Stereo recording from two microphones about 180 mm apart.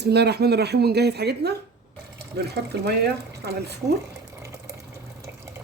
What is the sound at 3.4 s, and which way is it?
Speech, 65° right (ahead or behind).